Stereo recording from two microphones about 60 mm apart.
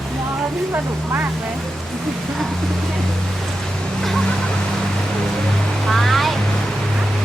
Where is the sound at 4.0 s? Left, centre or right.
Centre.